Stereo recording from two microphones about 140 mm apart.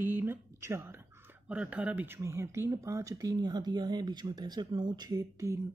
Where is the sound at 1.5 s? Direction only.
10° right (ahead or behind).